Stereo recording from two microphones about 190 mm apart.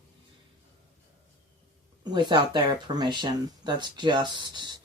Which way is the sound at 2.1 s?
25° right (ahead or behind).